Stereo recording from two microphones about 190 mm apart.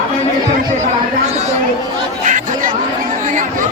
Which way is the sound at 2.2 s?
40° right (ahead or behind).